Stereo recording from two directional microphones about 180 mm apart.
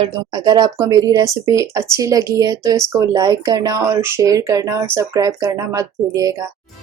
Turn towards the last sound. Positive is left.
turn(degrees=-20)  # may be behind; listen again after turning